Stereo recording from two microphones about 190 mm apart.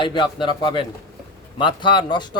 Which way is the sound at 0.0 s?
25° left (ahead or behind).